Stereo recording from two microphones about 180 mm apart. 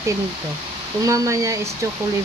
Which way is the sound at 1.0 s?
20° right (ahead or behind).